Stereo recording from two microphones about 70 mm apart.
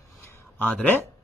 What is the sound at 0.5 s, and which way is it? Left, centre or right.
Speech, left.